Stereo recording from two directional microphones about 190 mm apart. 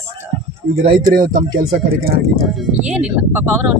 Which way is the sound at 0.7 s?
50° right (ahead or behind).